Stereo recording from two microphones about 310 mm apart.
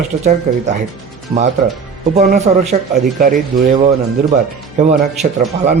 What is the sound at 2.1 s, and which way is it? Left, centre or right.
Speech, right.